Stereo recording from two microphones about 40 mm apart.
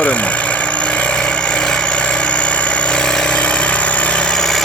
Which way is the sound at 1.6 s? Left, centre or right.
Left.